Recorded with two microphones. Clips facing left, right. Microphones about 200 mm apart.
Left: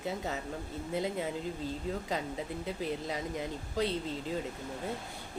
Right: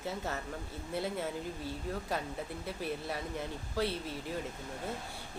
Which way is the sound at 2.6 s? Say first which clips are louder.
Left 2 dB; 20° left (ahead or behind).